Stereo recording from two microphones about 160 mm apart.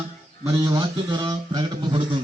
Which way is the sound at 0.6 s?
25° right (ahead or behind).